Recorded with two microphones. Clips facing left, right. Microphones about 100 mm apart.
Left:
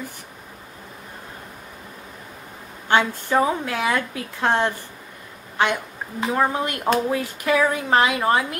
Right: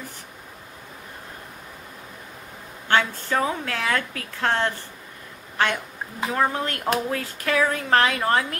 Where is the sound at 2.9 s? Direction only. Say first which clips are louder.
Left 3 dB; 15° left (ahead or behind).